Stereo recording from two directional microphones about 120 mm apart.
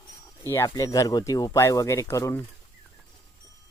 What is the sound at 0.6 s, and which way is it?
Speech, 30° left (ahead or behind).